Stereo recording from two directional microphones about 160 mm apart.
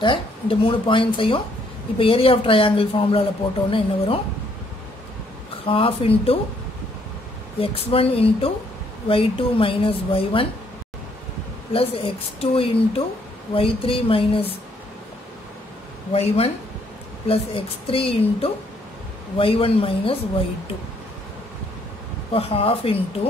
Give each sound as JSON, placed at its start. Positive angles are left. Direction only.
{"t": 0.0, "sound": "speech", "side_deg": 30}
{"t": 5.7, "sound": "speech", "side_deg": 35}
{"t": 7.5, "sound": "speech", "side_deg": 35}
{"t": 11.7, "sound": "speech", "side_deg": 35}
{"t": 16.1, "sound": "speech", "side_deg": 40}
{"t": 22.3, "sound": "speech", "side_deg": 35}